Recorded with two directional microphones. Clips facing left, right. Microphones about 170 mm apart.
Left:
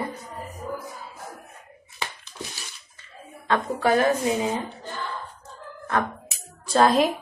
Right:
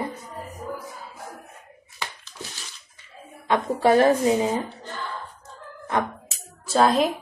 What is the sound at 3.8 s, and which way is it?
Speech, 30° right (ahead or behind).